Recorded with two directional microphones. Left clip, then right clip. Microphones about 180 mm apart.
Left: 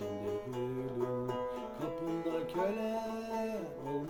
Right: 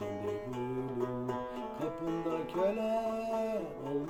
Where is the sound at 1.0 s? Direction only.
25° right (ahead or behind).